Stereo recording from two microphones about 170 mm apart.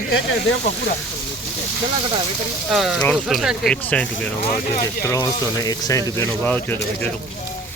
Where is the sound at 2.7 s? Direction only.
Centre (ahead or behind).